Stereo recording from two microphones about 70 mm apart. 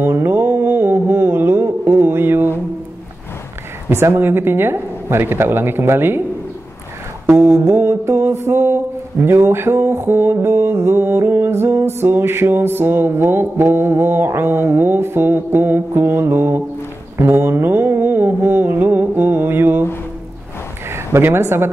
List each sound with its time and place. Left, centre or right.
0.0 s a sound: right
3.9 s speech: right
7.7 s speech: right
20.9 s speech: right